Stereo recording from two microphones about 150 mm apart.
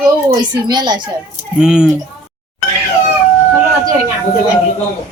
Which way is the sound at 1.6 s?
5° right (ahead or behind).